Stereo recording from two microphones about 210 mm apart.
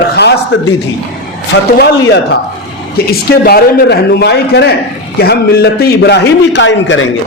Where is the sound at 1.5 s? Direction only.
55° left (ahead or behind).